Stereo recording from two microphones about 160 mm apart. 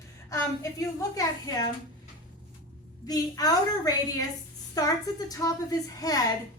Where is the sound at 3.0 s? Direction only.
25° left (ahead or behind).